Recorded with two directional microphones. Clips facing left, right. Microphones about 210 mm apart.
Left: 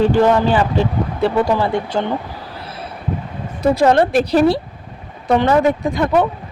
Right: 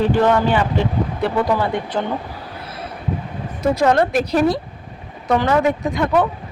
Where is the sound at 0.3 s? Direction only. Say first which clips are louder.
Left 2 dB; 30° left (ahead or behind).